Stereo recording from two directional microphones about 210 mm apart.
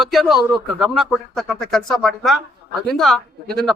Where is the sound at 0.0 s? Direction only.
Centre (ahead or behind).